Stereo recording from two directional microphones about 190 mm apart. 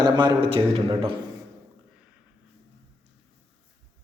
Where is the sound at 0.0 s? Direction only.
25° right (ahead or behind).